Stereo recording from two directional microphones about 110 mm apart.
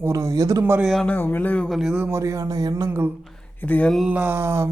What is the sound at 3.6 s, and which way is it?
Speech, 15° left (ahead or behind).